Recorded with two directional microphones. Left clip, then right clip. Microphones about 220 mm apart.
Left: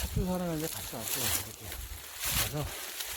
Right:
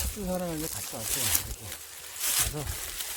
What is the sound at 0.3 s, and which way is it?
Speech, 45° left (ahead or behind).